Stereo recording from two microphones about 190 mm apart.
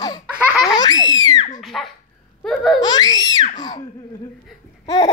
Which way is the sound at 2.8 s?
20° left (ahead or behind).